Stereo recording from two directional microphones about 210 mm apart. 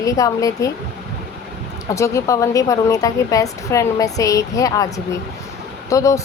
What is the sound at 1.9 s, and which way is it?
Speech, 15° left (ahead or behind).